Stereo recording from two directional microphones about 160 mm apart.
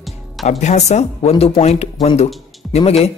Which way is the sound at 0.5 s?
45° left (ahead or behind).